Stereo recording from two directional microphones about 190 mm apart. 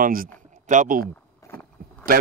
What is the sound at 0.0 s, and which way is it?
Speech, 50° right (ahead or behind).